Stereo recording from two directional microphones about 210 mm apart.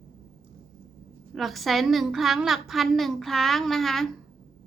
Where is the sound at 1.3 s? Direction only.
Centre (ahead or behind).